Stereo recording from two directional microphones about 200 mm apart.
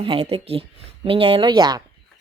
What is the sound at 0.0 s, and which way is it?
A woman's voice, 30° right (ahead or behind).